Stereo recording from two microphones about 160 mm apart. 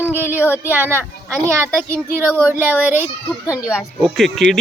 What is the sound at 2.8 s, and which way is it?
Speech, 10° right (ahead or behind).